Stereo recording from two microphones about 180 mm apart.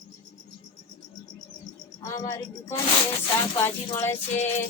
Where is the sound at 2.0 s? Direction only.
20° left (ahead or behind).